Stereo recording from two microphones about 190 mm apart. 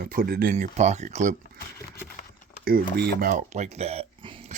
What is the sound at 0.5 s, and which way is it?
Speech, 35° right (ahead or behind).